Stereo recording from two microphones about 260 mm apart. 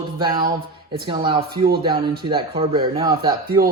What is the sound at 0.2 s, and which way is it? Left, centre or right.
Speech, centre.